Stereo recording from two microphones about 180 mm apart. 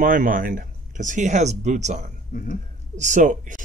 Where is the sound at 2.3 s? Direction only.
50° left (ahead or behind).